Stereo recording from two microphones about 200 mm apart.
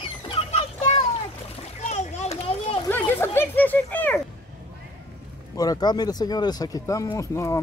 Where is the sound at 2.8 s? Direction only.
10° left (ahead or behind).